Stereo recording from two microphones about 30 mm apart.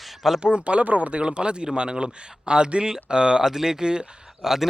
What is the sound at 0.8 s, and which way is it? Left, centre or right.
Speech, right.